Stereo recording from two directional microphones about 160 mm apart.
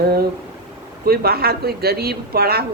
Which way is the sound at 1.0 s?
75° right (ahead or behind).